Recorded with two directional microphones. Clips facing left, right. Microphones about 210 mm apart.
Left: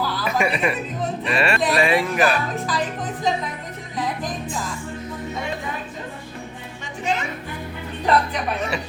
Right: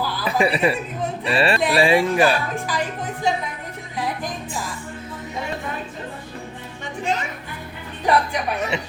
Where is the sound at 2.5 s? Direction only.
10° right (ahead or behind).